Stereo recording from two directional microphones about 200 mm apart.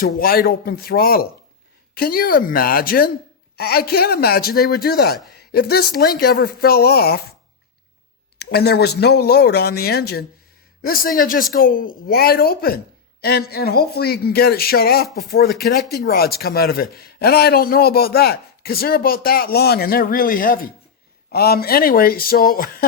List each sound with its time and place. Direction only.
0.0 s a man's voice: 45° left (ahead or behind)
8.4 s a man's voice: 55° left (ahead or behind)